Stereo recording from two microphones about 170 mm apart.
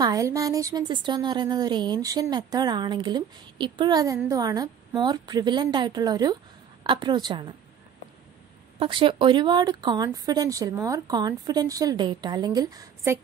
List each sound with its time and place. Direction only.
0.0 s a woman's voice: 20° right (ahead or behind)
8.7 s a woman's voice: 30° right (ahead or behind)